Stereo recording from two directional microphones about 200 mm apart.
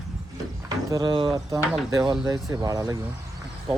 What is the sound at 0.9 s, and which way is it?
Speech, 20° right (ahead or behind).